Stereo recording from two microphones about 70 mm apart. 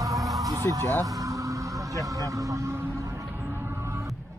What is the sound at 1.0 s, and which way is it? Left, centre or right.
Vehicle, right.